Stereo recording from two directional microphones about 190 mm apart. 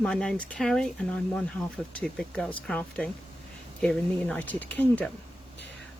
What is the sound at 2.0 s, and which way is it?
Speech, 5° left (ahead or behind).